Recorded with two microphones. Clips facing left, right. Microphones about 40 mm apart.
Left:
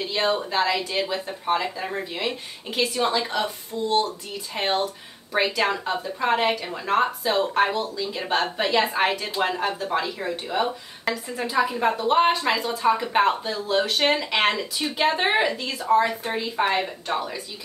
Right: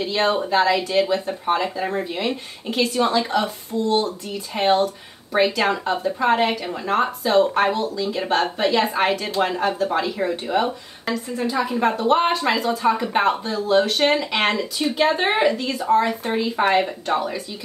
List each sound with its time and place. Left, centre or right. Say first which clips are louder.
0.0 s speech: right 3 dB; centre
11.2 s a woman's voice: even; centre
11.7 s speech: right 5 dB; centre